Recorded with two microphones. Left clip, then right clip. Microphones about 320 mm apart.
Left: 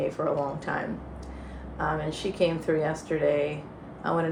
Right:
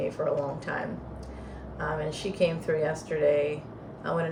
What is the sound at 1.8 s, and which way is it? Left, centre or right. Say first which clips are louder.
Speech: left 2 dB; centre.